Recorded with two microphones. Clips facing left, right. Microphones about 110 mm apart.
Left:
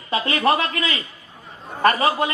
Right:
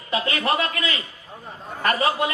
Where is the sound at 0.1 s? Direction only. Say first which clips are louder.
Left 4 dB; 30° left (ahead or behind).